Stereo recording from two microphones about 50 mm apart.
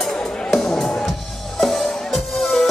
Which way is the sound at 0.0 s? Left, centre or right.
Centre.